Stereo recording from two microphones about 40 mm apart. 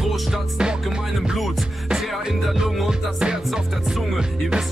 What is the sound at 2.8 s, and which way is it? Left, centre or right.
Music, centre.